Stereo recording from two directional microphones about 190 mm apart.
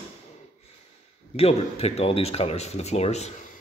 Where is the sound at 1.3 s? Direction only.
35° left (ahead or behind).